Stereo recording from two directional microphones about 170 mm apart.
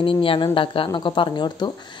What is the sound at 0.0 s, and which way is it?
Speech, 30° left (ahead or behind).